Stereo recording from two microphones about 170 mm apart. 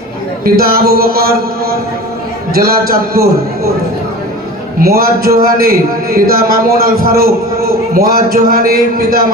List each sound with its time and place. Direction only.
0.4 s a man's voice: 60° right (ahead or behind)
4.8 s a man's voice: 60° right (ahead or behind)